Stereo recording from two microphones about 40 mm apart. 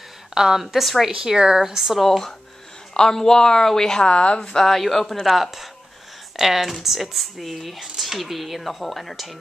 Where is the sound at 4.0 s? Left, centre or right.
Left.